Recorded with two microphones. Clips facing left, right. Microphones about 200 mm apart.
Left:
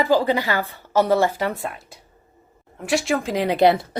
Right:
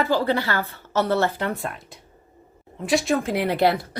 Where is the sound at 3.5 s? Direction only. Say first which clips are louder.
Left 5 dB; 20° left (ahead or behind).